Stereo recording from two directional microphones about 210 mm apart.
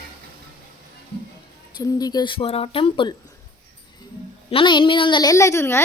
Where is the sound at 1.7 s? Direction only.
15° left (ahead or behind).